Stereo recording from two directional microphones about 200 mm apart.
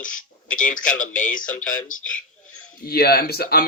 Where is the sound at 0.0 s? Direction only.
40° left (ahead or behind).